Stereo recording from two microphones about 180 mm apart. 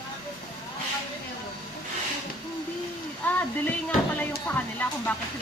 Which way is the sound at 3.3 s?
10° left (ahead or behind).